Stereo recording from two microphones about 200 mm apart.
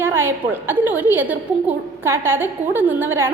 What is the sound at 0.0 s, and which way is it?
A woman's voice, 10° right (ahead or behind).